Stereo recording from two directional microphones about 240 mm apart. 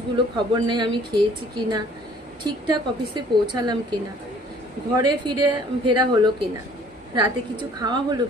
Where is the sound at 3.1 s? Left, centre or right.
Centre.